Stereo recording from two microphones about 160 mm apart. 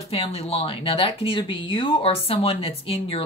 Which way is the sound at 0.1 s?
40° left (ahead or behind).